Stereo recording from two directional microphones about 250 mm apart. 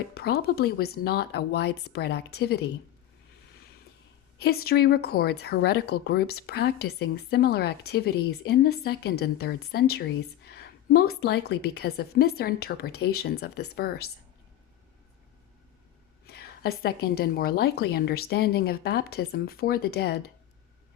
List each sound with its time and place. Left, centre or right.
0.1 s speech: left
4.4 s speech: left
16.2 s speech: left